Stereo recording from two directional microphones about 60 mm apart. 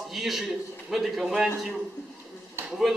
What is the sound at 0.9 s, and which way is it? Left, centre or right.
Speech, centre.